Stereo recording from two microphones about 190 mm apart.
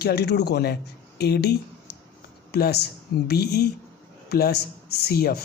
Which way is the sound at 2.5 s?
60° left (ahead or behind).